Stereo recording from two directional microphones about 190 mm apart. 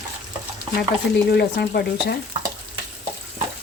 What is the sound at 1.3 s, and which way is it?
Speech, 60° left (ahead or behind).